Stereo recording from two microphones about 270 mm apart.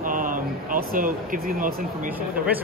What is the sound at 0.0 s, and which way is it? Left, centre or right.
Speech, right.